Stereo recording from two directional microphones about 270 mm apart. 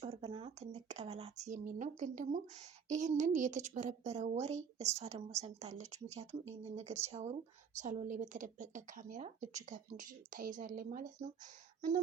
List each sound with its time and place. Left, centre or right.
0.0 s speech: centre